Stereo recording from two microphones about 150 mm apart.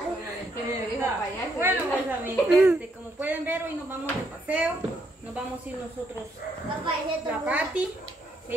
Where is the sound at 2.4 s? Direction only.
5° right (ahead or behind).